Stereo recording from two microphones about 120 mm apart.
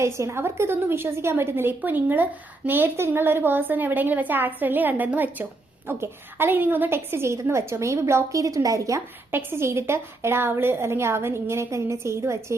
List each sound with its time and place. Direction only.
0.0 s a woman's voice: 25° right (ahead or behind)